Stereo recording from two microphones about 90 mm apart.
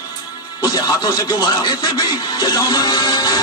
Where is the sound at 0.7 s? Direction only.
50° left (ahead or behind).